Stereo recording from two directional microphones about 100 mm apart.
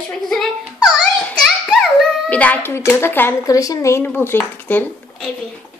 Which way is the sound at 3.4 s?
35° left (ahead or behind).